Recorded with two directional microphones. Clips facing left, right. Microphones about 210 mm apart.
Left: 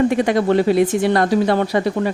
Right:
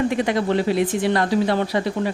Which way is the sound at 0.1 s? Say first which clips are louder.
Left 4 dB; 45° left (ahead or behind).